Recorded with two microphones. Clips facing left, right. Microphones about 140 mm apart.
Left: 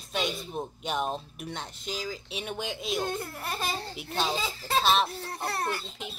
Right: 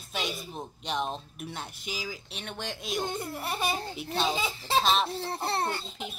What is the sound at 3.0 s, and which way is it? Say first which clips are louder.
Speech: even; 25° right (ahead or behind).